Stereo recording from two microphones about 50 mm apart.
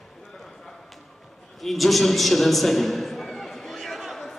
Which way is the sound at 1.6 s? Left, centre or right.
Centre.